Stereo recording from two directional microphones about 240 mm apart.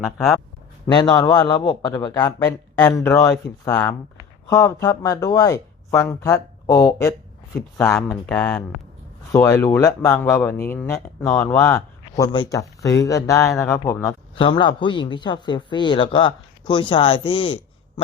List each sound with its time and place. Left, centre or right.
0.0 s speech: centre
0.9 s a man's voice: centre